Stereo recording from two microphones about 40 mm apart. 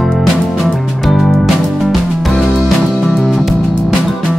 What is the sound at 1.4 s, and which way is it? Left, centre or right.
Music, centre.